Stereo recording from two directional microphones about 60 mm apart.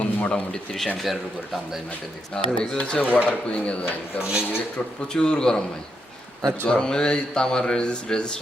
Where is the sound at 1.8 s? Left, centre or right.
Left.